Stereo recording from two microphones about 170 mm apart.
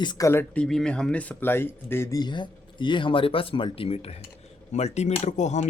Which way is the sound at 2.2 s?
25° left (ahead or behind).